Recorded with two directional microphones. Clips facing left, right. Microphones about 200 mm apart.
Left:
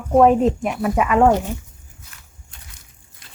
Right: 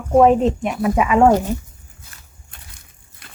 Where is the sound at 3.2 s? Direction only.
60° right (ahead or behind).